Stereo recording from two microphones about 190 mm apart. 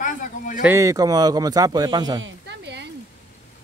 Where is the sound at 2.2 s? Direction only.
65° right (ahead or behind).